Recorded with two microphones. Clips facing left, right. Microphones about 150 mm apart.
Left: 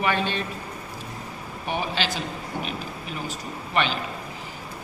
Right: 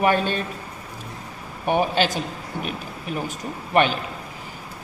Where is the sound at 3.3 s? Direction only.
50° right (ahead or behind).